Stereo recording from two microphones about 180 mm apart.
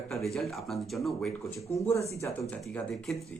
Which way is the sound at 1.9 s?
15° left (ahead or behind).